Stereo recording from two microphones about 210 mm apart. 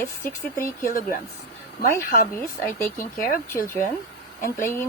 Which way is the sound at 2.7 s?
10° left (ahead or behind).